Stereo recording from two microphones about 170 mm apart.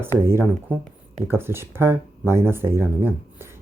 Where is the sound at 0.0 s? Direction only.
15° right (ahead or behind).